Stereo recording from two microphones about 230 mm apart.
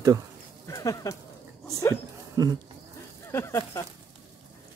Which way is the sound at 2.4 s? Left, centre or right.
Centre.